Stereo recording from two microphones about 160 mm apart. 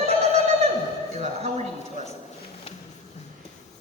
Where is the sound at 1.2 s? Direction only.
45° right (ahead or behind).